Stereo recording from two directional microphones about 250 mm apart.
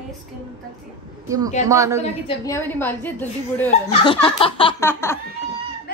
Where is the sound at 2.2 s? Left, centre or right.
Centre.